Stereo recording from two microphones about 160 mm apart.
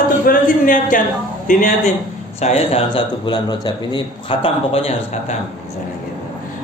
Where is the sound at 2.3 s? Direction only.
40° left (ahead or behind).